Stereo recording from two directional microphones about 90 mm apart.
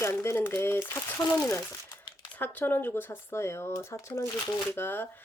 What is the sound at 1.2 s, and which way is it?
Speech, 40° left (ahead or behind).